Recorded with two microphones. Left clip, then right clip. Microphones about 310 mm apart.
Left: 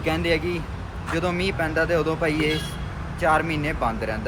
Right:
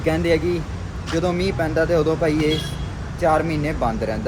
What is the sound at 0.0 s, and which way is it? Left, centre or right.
Speech, centre.